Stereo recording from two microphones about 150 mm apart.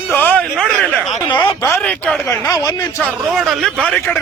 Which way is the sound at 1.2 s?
30° left (ahead or behind).